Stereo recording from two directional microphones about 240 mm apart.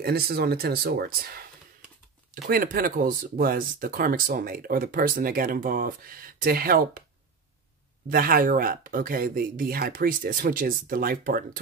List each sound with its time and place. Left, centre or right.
0.0 s speech: right
2.4 s speech: right
8.1 s speech: right